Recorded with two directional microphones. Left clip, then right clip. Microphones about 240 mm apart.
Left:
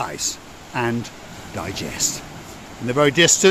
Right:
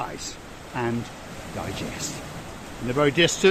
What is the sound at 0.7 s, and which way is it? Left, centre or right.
Speech, left.